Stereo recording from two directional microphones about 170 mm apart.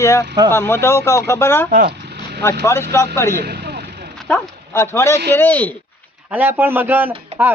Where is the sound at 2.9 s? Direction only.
15° left (ahead or behind).